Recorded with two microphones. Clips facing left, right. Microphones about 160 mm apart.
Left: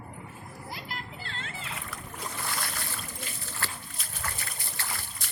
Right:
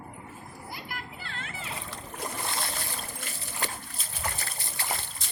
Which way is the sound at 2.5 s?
25° right (ahead or behind).